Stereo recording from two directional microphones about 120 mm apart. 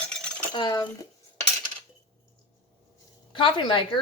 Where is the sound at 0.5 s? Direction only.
40° left (ahead or behind).